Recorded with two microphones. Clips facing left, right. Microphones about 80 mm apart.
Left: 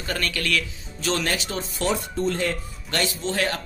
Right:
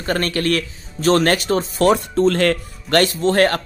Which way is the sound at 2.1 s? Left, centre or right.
Right.